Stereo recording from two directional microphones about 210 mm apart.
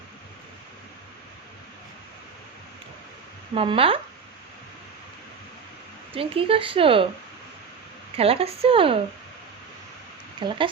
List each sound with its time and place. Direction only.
3.5 s speech: 25° right (ahead or behind)
6.1 s speech: 25° right (ahead or behind)
8.1 s speech: 25° right (ahead or behind)
10.4 s speech: 20° right (ahead or behind)